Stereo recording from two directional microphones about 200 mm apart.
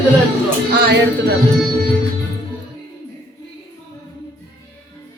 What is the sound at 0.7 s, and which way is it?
Speech, 55° right (ahead or behind).